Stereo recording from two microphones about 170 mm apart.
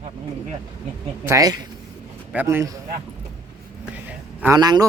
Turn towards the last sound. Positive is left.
turn(degrees=-25)  # may be behind; listen again after turning